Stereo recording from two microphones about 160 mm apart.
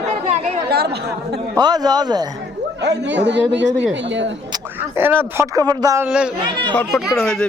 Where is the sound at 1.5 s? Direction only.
25° right (ahead or behind).